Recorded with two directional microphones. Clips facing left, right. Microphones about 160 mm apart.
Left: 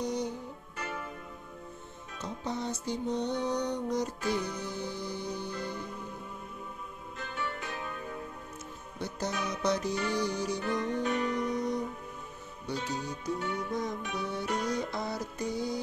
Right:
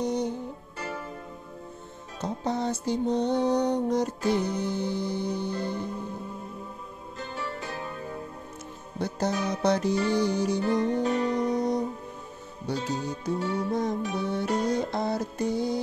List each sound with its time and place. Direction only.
0.0 s music: 25° right (ahead or behind)
0.7 s music: 35° right (ahead or behind)
2.1 s music: 35° right (ahead or behind)
7.2 s music: 35° right (ahead or behind)
9.3 s music: 35° right (ahead or behind)